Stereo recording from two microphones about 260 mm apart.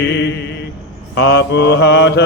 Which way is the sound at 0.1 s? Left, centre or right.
Left.